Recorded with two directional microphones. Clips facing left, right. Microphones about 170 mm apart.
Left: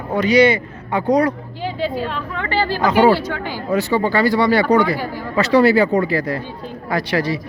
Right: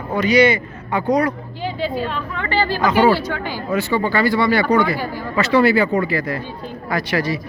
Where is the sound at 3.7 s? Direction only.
35° left (ahead or behind).